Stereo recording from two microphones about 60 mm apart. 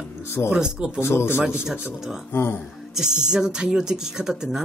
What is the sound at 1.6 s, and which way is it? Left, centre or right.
Speech, centre.